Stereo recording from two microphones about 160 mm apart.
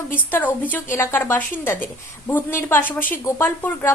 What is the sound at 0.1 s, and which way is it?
A woman's voice, 10° left (ahead or behind).